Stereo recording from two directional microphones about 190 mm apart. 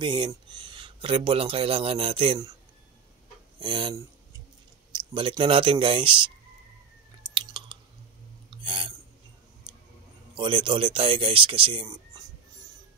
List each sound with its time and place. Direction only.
0.0 s speech: 25° right (ahead or behind)
3.5 s speech: 25° right (ahead or behind)
7.3 s chewing: 25° right (ahead or behind)
8.5 s a sound: 25° right (ahead or behind)
10.3 s speech: 25° right (ahead or behind)